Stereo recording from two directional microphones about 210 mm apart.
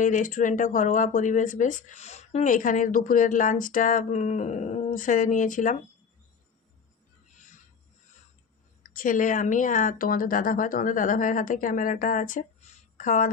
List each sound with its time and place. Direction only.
0.0 s speech: 40° left (ahead or behind)
8.8 s speech: 40° left (ahead or behind)